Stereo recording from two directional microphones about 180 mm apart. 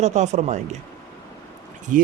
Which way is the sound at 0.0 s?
40° right (ahead or behind).